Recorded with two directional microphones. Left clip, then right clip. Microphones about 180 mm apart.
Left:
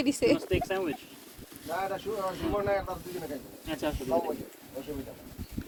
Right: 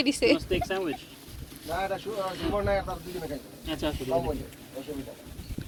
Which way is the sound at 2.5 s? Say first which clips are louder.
Right 2 dB; 10° left (ahead or behind).